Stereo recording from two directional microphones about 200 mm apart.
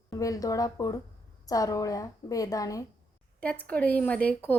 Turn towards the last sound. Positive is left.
turn(degrees=5)  # may be behind; listen again after turning